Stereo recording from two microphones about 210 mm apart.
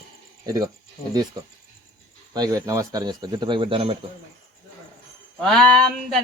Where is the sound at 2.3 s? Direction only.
15° right (ahead or behind).